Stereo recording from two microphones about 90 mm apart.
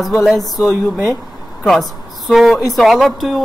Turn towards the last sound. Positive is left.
turn(degrees=0)  # may be behind; listen again after turning